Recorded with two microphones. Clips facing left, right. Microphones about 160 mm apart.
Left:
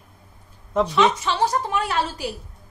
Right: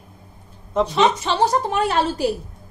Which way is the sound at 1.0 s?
25° right (ahead or behind).